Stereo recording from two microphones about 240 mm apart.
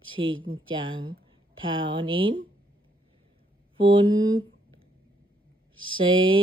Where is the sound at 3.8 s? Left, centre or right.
Right.